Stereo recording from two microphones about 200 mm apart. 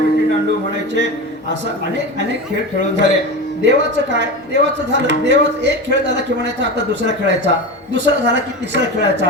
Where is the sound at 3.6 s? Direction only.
60° right (ahead or behind).